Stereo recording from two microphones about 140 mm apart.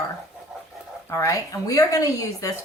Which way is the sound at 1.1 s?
20° left (ahead or behind).